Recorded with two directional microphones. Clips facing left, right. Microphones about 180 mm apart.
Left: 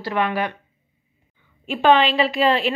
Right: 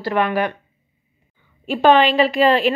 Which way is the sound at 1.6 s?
40° right (ahead or behind).